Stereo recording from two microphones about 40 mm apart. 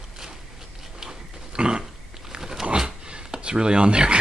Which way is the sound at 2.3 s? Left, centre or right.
Centre.